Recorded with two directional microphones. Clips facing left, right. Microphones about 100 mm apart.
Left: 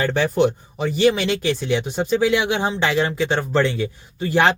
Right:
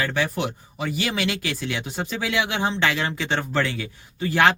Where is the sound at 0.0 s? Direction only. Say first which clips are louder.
Left 7 dB; 30° left (ahead or behind).